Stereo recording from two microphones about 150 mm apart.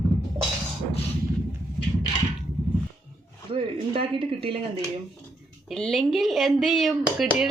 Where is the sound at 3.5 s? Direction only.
40° right (ahead or behind).